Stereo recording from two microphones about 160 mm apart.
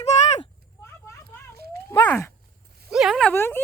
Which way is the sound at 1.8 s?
15° left (ahead or behind).